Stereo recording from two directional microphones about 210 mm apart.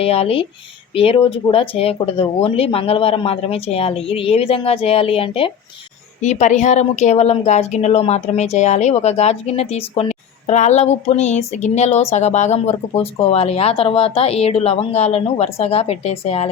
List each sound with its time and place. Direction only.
0.0 s speech: 30° left (ahead or behind)